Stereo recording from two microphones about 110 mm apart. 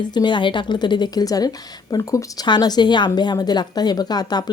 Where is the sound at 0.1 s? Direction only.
40° left (ahead or behind).